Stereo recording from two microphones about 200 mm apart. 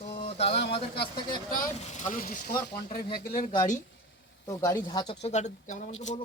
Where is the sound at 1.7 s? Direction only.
35° left (ahead or behind).